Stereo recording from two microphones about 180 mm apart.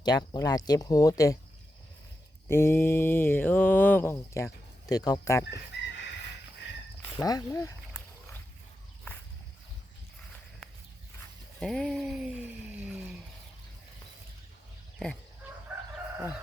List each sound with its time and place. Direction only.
0.0 s speech: 20° left (ahead or behind)
2.5 s mantra: 15° left (ahead or behind)
4.9 s speech: 20° left (ahead or behind)
5.7 s chicken: 75° left (ahead or behind)
7.2 s speech: 20° left (ahead or behind)
11.6 s speech: centre (ahead or behind)
14.9 s speech: 5° left (ahead or behind)